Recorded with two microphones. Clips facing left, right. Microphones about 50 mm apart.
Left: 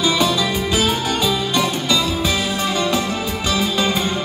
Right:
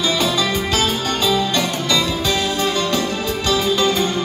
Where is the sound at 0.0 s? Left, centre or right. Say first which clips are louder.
Left 1 dB; centre.